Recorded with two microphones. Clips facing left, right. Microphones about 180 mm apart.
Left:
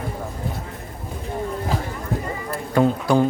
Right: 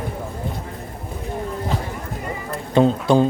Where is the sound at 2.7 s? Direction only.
20° right (ahead or behind).